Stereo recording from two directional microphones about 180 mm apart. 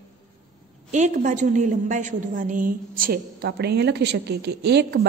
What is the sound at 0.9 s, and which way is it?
A woman's voice, 45° right (ahead or behind).